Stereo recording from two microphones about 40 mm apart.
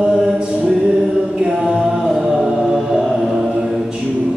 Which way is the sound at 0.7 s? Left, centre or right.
Right.